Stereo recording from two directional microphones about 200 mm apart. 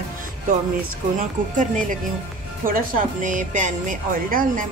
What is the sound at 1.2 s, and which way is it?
Speech, 40° right (ahead or behind).